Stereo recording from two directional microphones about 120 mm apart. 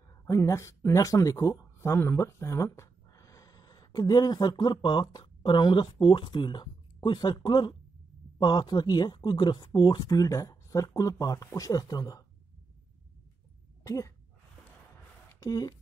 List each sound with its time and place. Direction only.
0.1 s speech: 25° left (ahead or behind)
13.8 s speech: 25° left (ahead or behind)
15.2 s a sound: 30° left (ahead or behind)